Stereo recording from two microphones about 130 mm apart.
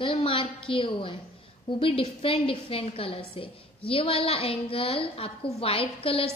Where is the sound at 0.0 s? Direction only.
45° left (ahead or behind).